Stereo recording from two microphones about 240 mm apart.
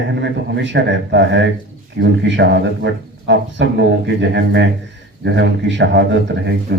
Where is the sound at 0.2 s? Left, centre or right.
Right.